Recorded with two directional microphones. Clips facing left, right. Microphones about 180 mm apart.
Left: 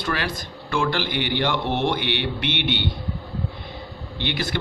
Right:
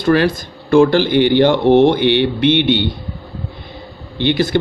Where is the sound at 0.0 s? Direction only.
35° right (ahead or behind).